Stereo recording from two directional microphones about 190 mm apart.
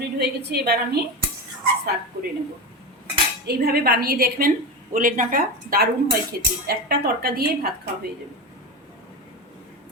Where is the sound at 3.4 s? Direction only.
55° right (ahead or behind).